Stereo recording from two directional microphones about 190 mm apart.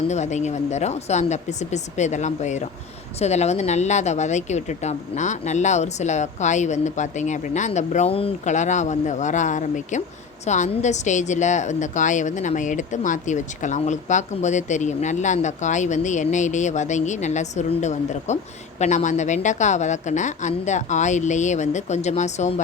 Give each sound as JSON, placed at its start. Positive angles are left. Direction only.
{"t": 0.1, "sound": "a woman's voice", "side_deg": 35}